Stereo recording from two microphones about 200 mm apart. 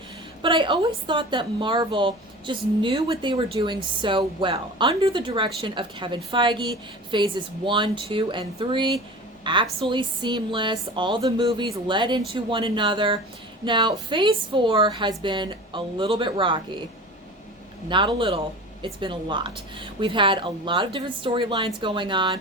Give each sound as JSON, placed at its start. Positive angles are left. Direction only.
{"t": 0.4, "sound": "a woman's voice", "side_deg": -25}
{"t": 17.8, "sound": "a woman's voice", "side_deg": -25}